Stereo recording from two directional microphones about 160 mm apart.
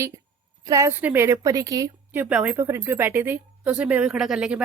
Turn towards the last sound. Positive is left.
turn(degrees=-5)  # may be behind; listen again after turning